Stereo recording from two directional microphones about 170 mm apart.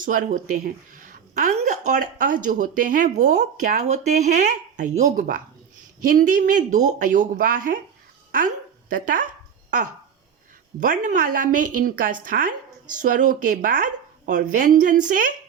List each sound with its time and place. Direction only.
0.0 s a woman's voice: 50° right (ahead or behind)
8.9 s a woman's voice: 55° right (ahead or behind)